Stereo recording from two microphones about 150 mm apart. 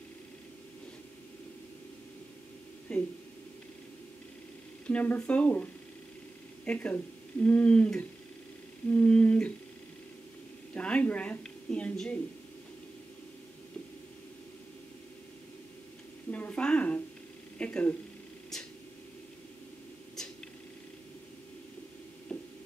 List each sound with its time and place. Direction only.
2.9 s speech: 5° left (ahead or behind)
4.8 s speech: 10° left (ahead or behind)
10.7 s a woman's voice: 5° left (ahead or behind)
16.3 s a sound: 10° left (ahead or behind)
17.6 s speech: 10° left (ahead or behind)
22.3 s a sound: 5° left (ahead or behind)